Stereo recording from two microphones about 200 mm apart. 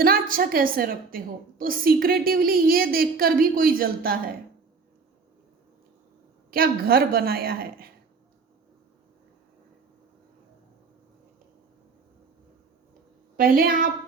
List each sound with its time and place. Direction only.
0.0 s a woman's voice: 45° right (ahead or behind)
6.5 s a woman's voice: 50° right (ahead or behind)
13.3 s a woman's voice: 45° right (ahead or behind)